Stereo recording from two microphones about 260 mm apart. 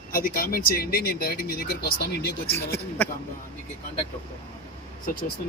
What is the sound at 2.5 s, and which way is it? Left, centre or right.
Speech, centre.